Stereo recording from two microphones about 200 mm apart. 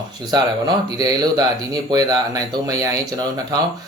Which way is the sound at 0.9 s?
20° right (ahead or behind).